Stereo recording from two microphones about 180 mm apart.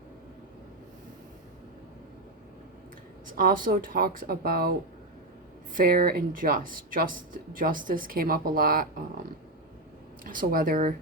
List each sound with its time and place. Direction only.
3.3 s speech: 50° right (ahead or behind)
5.7 s speech: 55° right (ahead or behind)
10.2 s speech: 50° right (ahead or behind)